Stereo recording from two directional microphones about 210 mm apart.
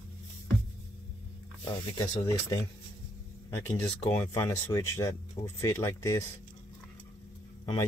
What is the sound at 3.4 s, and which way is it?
Speech, 15° left (ahead or behind).